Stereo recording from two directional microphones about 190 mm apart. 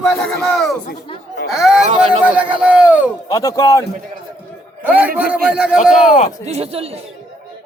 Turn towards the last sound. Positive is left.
turn(degrees=-30)  # may be behind; listen again after turning